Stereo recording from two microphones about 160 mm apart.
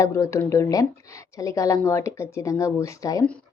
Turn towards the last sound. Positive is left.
turn(degrees=20)  # may be behind; listen again after turning